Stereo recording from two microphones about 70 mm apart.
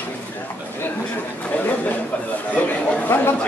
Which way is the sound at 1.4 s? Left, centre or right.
Left.